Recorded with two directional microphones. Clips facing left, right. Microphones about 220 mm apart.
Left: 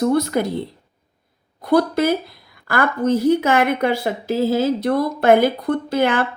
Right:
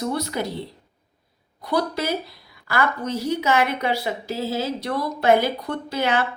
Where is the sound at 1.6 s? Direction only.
50° left (ahead or behind).